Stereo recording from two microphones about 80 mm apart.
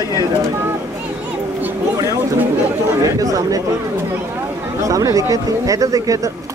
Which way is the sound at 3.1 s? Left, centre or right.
Right.